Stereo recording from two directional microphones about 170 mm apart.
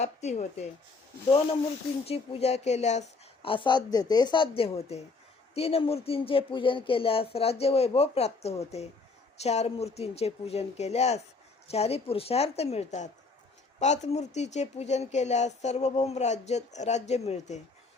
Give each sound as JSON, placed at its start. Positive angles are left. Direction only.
{"t": 0.0, "sound": "speech", "side_deg": 40}
{"t": 2.0, "sound": "speech", "side_deg": 35}